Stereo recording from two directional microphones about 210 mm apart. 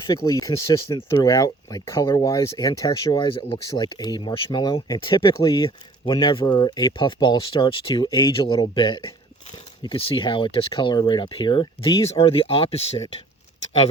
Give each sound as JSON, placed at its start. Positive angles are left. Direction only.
{"t": 0.1, "sound": "speech", "side_deg": 15}